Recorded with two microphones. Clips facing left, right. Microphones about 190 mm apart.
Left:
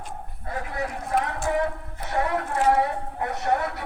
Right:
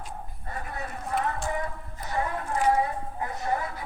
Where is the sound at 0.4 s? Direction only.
90° left.